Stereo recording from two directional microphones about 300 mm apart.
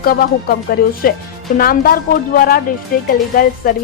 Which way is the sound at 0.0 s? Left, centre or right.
Left.